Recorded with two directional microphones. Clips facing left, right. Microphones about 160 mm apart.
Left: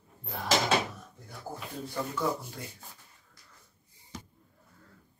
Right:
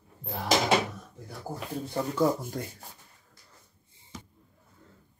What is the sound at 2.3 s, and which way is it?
Rub, 45° right (ahead or behind).